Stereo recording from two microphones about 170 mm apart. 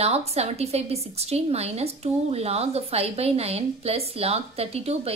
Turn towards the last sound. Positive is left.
turn(degrees=-35)  # may be behind; listen again after turning